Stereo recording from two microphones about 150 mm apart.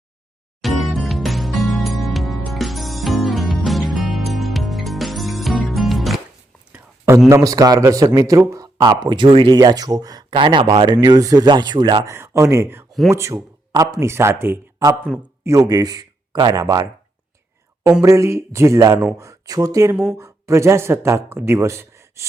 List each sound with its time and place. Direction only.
0.6 s music: centre (ahead or behind)
6.7 s a sound: 20° right (ahead or behind)
7.3 s speech: 20° right (ahead or behind)
12.0 s speech: 15° right (ahead or behind)
15.1 s speech: 5° left (ahead or behind)
15.4 s speech: 25° right (ahead or behind)
18.0 s speech: 20° right (ahead or behind)